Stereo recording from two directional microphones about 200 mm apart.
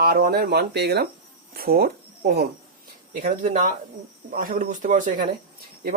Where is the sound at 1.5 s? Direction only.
50° right (ahead or behind).